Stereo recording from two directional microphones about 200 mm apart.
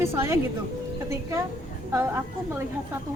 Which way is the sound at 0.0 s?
15° right (ahead or behind).